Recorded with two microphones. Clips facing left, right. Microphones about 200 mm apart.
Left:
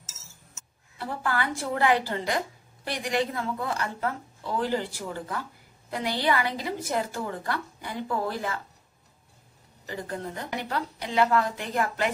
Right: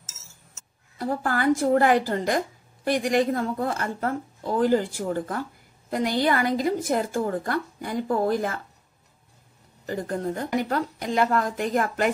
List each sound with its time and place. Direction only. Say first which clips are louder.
0.9 s a woman's voice: right 4 dB; 45° right (ahead or behind)
9.8 s a woman's voice: right 6 dB; 45° right (ahead or behind)